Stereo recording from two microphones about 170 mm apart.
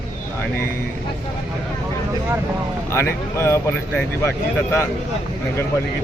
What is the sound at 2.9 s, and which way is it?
Speech, 15° left (ahead or behind).